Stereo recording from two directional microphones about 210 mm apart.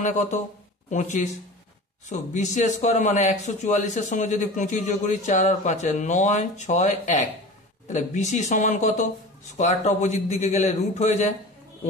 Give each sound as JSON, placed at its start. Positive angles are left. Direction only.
{"t": 0.0, "sound": "speech", "side_deg": 35}